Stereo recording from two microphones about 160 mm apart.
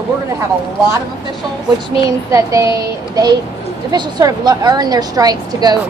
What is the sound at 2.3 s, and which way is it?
A woman's voice, 20° right (ahead or behind).